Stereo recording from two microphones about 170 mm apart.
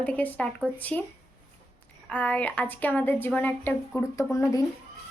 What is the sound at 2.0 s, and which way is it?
Speech, 5° left (ahead or behind).